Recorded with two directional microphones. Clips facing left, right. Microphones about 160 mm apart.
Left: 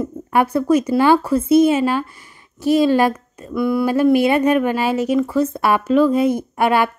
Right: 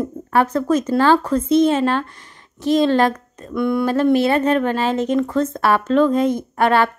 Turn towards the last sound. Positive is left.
turn(degrees=10)  # may be behind; listen again after turning